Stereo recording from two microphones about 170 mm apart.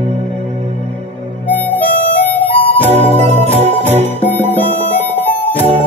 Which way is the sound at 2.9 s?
40° right (ahead or behind).